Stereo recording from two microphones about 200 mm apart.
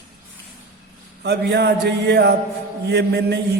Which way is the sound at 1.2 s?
60° right (ahead or behind).